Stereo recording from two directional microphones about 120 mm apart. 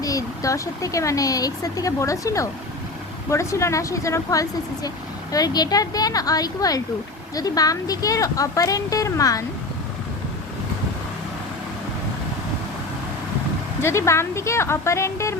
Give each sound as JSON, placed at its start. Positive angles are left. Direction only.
{"t": 0.0, "sound": "speech", "side_deg": 30}
{"t": 13.8, "sound": "speech", "side_deg": 25}